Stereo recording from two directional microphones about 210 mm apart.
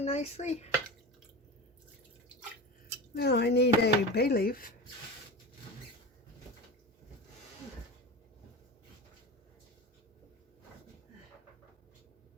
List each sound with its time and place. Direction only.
0.0 s speech: 30° left (ahead or behind)
3.2 s speech: 50° left (ahead or behind)